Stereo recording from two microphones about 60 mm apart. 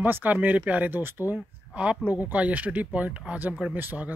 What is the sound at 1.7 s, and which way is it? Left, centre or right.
Speech, right.